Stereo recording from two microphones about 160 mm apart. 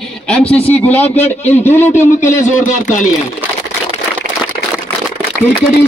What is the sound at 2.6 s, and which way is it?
Speech, 55° left (ahead or behind).